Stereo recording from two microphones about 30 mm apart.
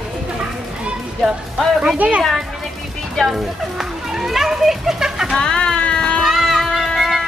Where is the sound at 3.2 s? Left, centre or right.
Centre.